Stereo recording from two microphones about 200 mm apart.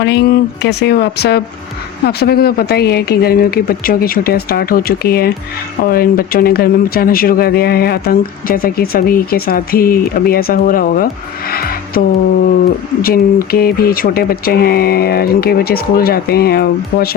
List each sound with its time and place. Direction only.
0.0 s speech: 60° left (ahead or behind)